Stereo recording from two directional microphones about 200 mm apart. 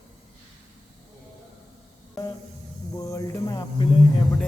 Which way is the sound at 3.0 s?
15° left (ahead or behind).